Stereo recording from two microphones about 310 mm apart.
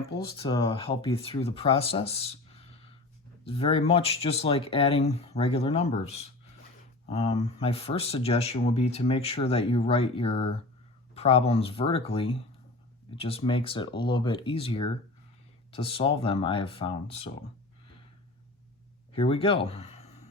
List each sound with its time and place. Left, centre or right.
0.3 s speech: centre
19.1 s speech: centre